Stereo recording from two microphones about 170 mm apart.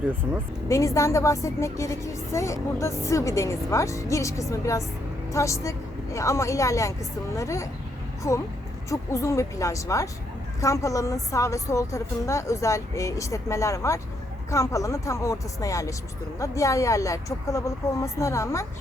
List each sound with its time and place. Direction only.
0.7 s a woman's voice: 20° left (ahead or behind)